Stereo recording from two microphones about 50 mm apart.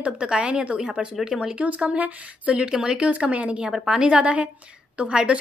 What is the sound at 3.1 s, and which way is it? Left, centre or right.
Speech, right.